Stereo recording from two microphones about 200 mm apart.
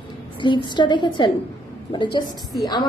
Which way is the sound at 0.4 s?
25° left (ahead or behind).